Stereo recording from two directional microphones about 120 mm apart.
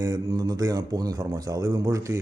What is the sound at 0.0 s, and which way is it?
A man's voice, 35° right (ahead or behind).